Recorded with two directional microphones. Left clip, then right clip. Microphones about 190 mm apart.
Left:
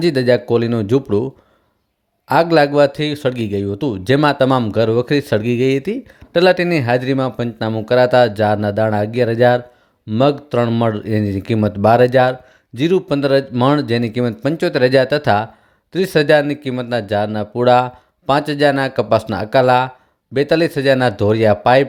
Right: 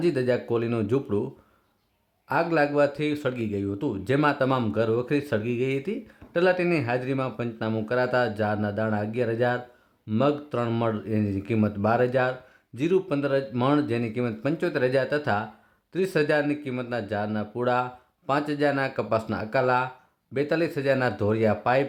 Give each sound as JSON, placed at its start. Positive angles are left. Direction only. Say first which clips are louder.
{"t": 0.0, "sound": "speech", "louder": "left 10 dB", "side_deg": 35}